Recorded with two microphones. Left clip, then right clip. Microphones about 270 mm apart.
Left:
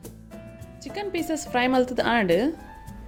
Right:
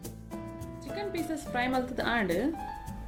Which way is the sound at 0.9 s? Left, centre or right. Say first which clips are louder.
Left 6 dB; left.